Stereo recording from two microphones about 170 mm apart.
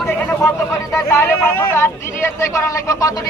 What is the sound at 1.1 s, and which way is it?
Speech, 15° left (ahead or behind).